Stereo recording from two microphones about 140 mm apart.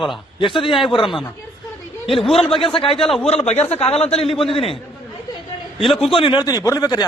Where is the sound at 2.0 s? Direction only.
40° left (ahead or behind).